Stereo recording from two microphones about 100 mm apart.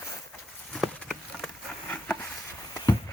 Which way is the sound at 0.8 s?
Centre (ahead or behind).